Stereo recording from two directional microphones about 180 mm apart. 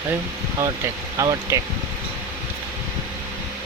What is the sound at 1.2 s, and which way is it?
Speech, 15° right (ahead or behind).